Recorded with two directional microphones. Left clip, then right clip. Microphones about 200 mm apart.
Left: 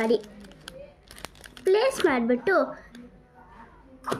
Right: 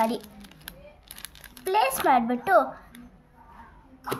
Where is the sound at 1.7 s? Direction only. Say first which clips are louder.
Right 1 dB; 55° right (ahead or behind).